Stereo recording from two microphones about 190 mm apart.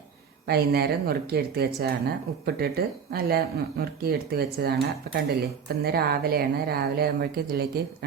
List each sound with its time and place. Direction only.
0.4 s speech: 55° right (ahead or behind)